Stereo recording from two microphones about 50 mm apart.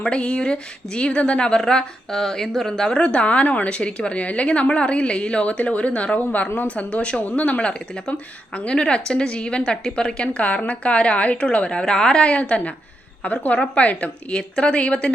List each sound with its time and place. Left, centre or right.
0.0 s speech: left
2.9 s a woman's voice: left